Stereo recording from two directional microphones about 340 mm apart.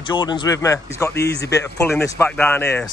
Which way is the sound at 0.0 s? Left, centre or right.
Centre.